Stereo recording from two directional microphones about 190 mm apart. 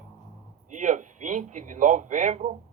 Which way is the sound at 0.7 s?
40° right (ahead or behind).